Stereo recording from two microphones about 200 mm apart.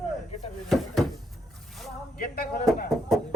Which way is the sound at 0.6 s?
Centre (ahead or behind).